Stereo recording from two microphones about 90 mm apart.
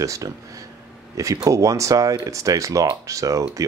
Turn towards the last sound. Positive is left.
turn(degrees=-40)  # may be behind; listen again after turning